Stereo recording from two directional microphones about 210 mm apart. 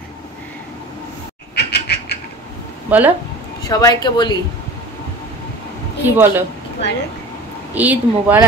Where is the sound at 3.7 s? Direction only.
15° left (ahead or behind).